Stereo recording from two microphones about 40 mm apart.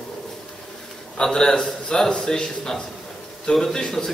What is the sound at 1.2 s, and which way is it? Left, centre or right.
A man's voice, centre.